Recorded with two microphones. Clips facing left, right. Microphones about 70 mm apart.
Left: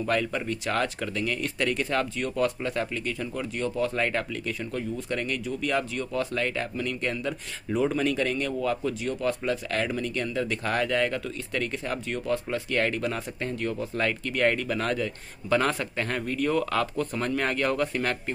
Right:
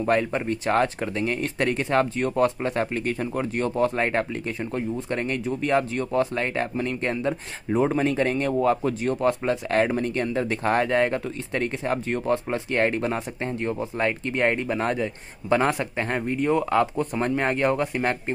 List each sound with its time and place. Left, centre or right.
0.0 s speech: right